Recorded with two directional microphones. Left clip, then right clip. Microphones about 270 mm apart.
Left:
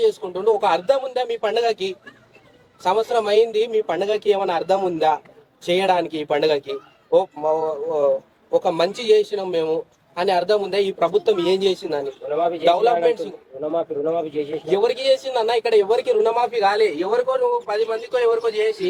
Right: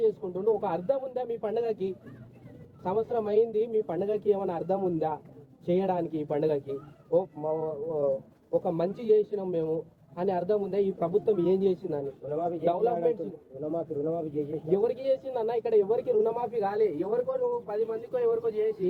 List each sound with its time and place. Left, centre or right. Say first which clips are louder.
0.0 s a man's voice: left 8 dB; centre; by 8.6 s left
8.6 s speech: left 9 dB; centre